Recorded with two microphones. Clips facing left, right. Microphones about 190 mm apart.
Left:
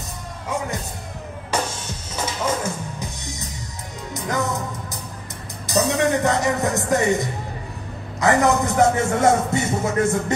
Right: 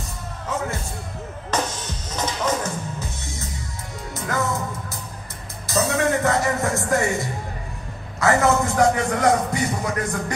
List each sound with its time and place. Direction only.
1.5 s music: 10° left (ahead or behind)
8.2 s a man's voice: 15° left (ahead or behind)